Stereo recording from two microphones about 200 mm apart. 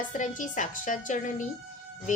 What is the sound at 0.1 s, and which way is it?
Speech, 40° left (ahead or behind).